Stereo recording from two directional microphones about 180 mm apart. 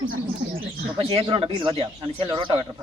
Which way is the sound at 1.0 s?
35° right (ahead or behind).